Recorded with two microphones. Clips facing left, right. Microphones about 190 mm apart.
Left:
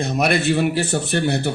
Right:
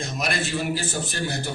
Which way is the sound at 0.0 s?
65° left (ahead or behind).